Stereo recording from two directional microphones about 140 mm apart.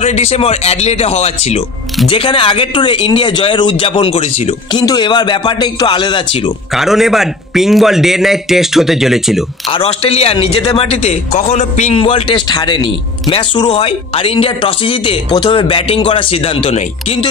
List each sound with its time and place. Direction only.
0.0 s speech: 50° left (ahead or behind)
2.0 s speech: 40° left (ahead or behind)
4.7 s speech: 30° left (ahead or behind)
6.7 s a man's voice: centre (ahead or behind)
9.7 s speech: 45° left (ahead or behind)
12.0 s speech: 35° left (ahead or behind)